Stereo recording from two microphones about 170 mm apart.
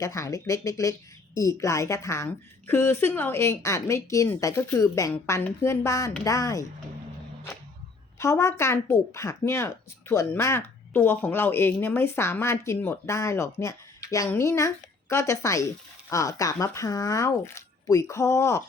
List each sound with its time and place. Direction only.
0.0 s speech: 20° left (ahead or behind)
8.2 s speech: 15° left (ahead or behind)